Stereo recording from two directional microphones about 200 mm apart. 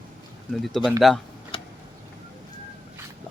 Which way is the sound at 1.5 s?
25° left (ahead or behind).